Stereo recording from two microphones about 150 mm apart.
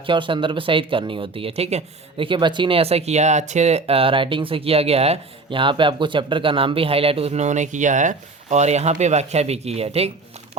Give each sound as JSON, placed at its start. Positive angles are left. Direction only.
{"t": 0.0, "sound": "speech", "side_deg": -35}